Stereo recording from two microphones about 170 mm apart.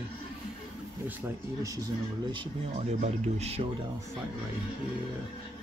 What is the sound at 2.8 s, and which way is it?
Speech, 40° right (ahead or behind).